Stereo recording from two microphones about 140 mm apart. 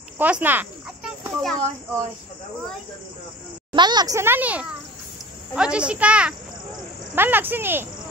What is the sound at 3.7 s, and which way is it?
Speech, 30° right (ahead or behind).